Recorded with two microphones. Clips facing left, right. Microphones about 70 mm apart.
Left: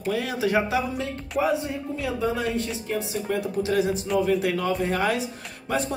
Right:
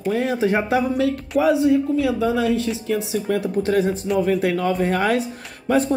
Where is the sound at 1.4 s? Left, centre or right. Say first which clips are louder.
Right 7 dB; right.